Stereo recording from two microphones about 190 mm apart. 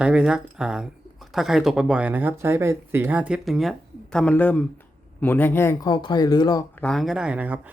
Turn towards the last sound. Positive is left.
turn(degrees=-10)  # may be behind; listen again after turning